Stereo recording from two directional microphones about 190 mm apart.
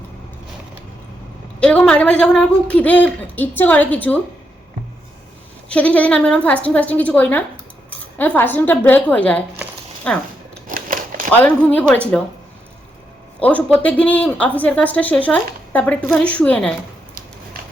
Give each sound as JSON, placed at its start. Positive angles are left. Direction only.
{"t": 1.6, "sound": "a woman's voice", "side_deg": 5}
{"t": 5.6, "sound": "a woman's voice", "side_deg": 5}
{"t": 10.0, "sound": "a sound", "side_deg": 5}
{"t": 10.7, "sound": "a sound", "side_deg": -45}
{"t": 11.3, "sound": "a woman's voice", "side_deg": 10}
{"t": 13.4, "sound": "a woman's voice", "side_deg": 10}